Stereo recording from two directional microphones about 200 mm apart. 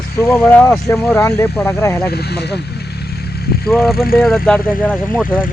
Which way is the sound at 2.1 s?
55° left (ahead or behind).